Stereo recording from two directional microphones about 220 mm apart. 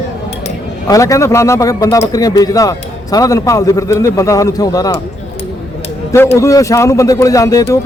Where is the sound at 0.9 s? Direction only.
15° left (ahead or behind).